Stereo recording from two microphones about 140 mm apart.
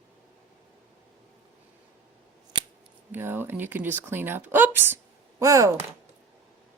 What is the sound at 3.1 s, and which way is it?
Speech, 15° right (ahead or behind).